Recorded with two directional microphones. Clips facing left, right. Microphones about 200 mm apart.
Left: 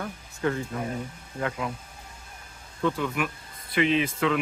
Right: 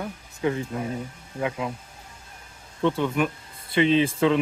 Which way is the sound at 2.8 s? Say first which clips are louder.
Right 4 dB; 25° right (ahead or behind).